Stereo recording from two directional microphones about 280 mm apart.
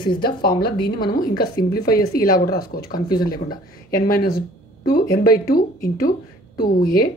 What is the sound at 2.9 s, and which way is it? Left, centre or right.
Speech, centre.